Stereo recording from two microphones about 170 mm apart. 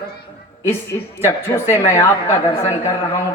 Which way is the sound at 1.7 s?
20° left (ahead or behind).